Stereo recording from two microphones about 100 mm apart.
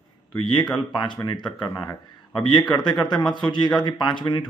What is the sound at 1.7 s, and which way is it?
A man's voice, 40° left (ahead or behind).